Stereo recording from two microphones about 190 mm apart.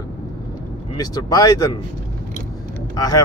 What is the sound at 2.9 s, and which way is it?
Speech, 20° left (ahead or behind).